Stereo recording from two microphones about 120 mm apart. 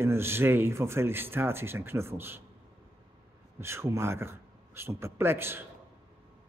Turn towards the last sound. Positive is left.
turn(degrees=-20)  # may be behind; listen again after turning